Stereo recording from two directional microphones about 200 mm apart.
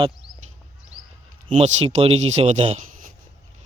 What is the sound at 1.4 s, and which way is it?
A man's voice, 30° right (ahead or behind).